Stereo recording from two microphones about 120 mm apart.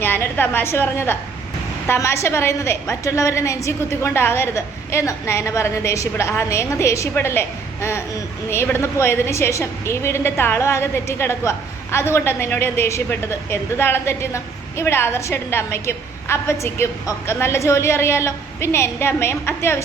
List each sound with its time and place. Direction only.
0.0 s a woman's voice: 15° left (ahead or behind)